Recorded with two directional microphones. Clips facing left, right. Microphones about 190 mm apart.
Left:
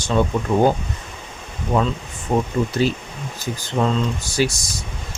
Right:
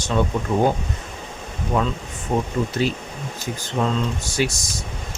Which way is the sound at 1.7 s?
35° left (ahead or behind).